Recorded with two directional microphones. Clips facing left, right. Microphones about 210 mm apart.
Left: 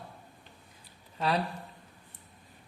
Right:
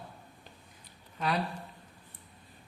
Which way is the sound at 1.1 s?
30° left (ahead or behind).